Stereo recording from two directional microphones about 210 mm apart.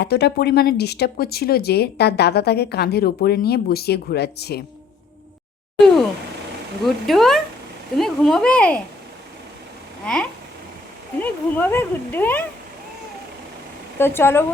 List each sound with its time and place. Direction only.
0.0 s speech: 50° left (ahead or behind)
6.8 s speech: centre (ahead or behind)
10.0 s speech: 5° left (ahead or behind)
14.0 s speech: 10° left (ahead or behind)